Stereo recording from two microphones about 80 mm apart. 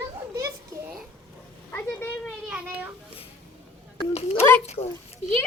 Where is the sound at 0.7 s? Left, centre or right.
Right.